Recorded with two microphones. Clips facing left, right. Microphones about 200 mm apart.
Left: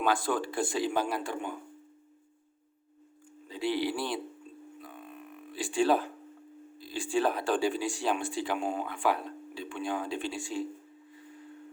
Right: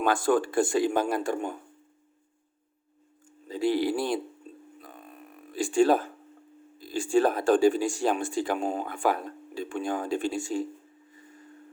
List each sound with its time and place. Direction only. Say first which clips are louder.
0.0 s speech: right 5 dB; 50° right (ahead or behind)
3.5 s speech: right 5 dB; 45° right (ahead or behind)
4.8 s a sound: left 1 dB; 40° right (ahead or behind)
6.7 s speech: right 6 dB; 45° right (ahead or behind)